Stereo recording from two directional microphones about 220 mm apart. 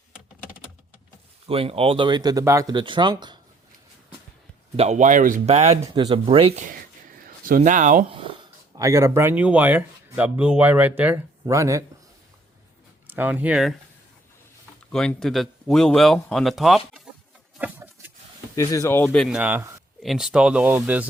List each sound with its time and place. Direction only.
1.5 s speech: 25° right (ahead or behind)
4.8 s speech: 30° right (ahead or behind); by 11.8 s 15° right (ahead or behind)
13.1 s speech: 10° right (ahead or behind)
14.9 s speech: centre (ahead or behind)
17.6 s patter: 5° right (ahead or behind)
18.5 s speech: 15° left (ahead or behind); by 21.1 s 5° right (ahead or behind)